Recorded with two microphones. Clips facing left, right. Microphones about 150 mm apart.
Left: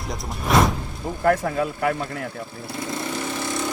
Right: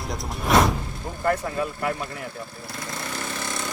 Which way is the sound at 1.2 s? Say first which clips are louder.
Left 4 dB; 75° left (ahead or behind).